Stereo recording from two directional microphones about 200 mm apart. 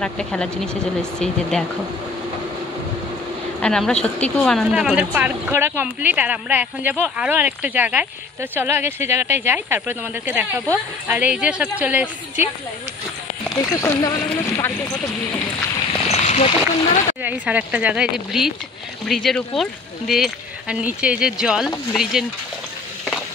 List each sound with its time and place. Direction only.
0.0 s speech: 5° left (ahead or behind)
3.6 s a woman's voice: 5° left (ahead or behind)
13.7 s speech: 15° left (ahead or behind)
16.1 s a sound: 35° left (ahead or behind)
17.2 s a woman's voice: 10° right (ahead or behind)